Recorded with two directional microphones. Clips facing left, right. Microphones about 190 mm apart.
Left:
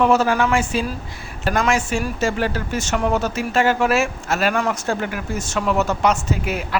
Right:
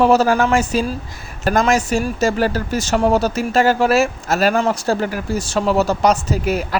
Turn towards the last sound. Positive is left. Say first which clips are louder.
# right 4 dB
turn(degrees=-40)  # may be behind; listen again after turning